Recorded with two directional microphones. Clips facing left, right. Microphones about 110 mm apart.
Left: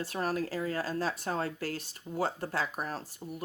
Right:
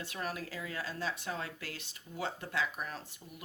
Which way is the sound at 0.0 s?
40° left (ahead or behind).